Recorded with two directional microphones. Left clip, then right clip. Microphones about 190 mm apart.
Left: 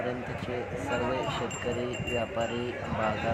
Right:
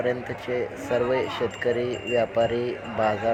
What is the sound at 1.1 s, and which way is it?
A man's voice, 20° right (ahead or behind).